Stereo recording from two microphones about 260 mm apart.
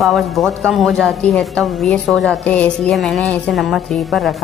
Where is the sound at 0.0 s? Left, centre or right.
Centre.